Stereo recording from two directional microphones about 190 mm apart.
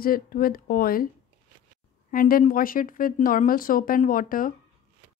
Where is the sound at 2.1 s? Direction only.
50° left (ahead or behind).